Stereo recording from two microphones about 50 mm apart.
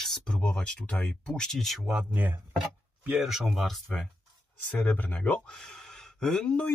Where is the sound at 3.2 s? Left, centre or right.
Centre.